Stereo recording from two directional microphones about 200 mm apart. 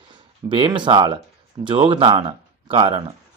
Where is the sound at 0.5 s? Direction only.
25° right (ahead or behind).